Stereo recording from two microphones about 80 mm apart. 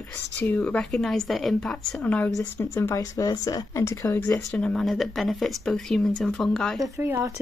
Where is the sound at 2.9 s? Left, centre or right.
Left.